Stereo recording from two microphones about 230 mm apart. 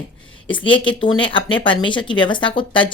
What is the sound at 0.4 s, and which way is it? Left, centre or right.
A woman's voice, left.